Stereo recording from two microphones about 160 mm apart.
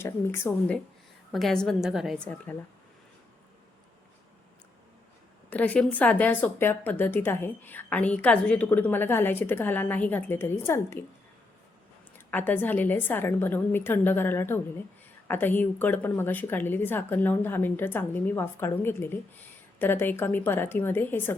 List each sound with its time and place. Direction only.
0.0 s a woman's voice: 15° left (ahead or behind)
1.3 s a woman's voice: centre (ahead or behind)
5.5 s a woman's voice: 10° left (ahead or behind)
12.1 s a woman's voice: 10° left (ahead or behind)